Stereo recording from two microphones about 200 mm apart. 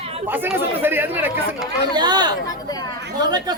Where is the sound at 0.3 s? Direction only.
10° right (ahead or behind).